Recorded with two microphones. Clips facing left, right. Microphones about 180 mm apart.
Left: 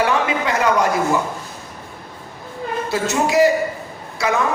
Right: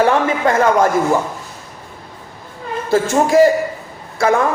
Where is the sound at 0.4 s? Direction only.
50° right (ahead or behind).